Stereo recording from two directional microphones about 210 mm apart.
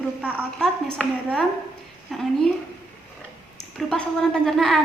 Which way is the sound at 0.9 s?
5° left (ahead or behind).